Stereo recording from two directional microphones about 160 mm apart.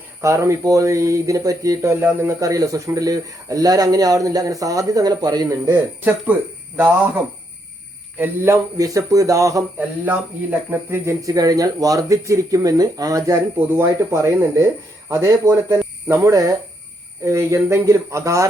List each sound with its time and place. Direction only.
0.2 s speech: 20° right (ahead or behind)
8.2 s speech: 20° right (ahead or behind)